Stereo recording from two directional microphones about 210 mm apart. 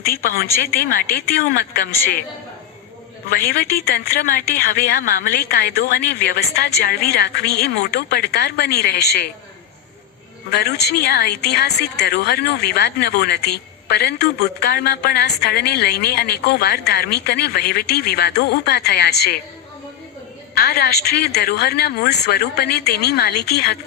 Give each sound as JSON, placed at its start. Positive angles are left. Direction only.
{"t": 0.0, "sound": "a woman's voice", "side_deg": 45}
{"t": 3.2, "sound": "a woman's voice", "side_deg": 45}
{"t": 10.5, "sound": "a woman's voice", "side_deg": 50}
{"t": 20.6, "sound": "a woman's voice", "side_deg": 50}